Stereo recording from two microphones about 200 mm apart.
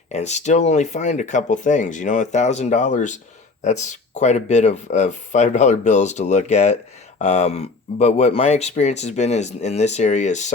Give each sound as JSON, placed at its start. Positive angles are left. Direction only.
{"t": 0.1, "sound": "speech", "side_deg": 35}